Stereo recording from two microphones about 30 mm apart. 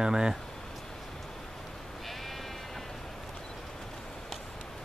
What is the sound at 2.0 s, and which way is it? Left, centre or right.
Sheep, centre.